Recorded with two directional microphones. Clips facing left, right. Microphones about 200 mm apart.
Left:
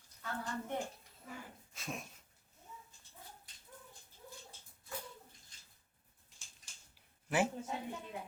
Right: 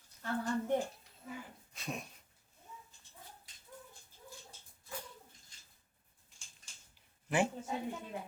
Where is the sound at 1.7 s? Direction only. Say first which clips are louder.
Right 2 dB; centre (ahead or behind).